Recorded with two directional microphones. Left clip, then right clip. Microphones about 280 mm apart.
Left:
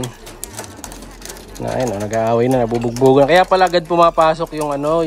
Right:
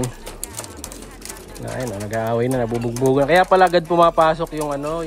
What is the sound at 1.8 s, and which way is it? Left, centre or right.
Speech, centre.